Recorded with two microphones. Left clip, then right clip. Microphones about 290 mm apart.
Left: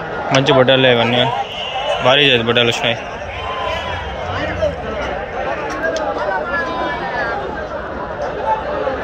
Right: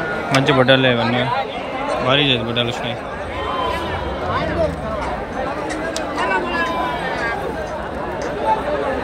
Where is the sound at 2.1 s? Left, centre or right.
Centre.